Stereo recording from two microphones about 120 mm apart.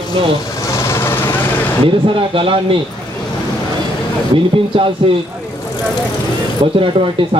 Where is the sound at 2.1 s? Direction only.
50° right (ahead or behind).